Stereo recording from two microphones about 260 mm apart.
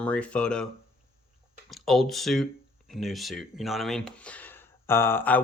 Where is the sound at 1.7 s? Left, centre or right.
Centre.